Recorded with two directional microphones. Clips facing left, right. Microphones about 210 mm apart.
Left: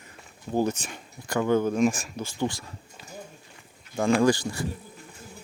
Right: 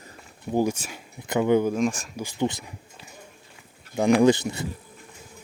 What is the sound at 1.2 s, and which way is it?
Speech, 20° right (ahead or behind).